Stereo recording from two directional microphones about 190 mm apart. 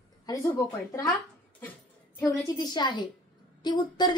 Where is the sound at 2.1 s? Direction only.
15° left (ahead or behind).